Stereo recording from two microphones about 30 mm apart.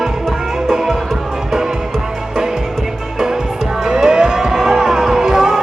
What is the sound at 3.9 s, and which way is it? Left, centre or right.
Music, right.